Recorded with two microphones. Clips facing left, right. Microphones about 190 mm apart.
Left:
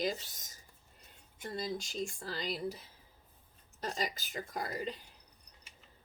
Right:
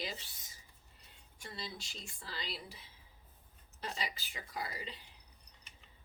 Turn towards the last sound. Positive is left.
turn(degrees=45)  # may be behind; listen again after turning